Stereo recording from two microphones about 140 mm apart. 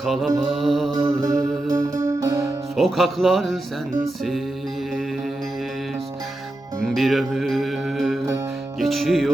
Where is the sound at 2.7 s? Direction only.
Centre (ahead or behind).